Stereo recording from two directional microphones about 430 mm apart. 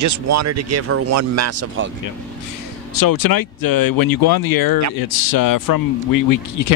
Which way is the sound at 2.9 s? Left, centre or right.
Left.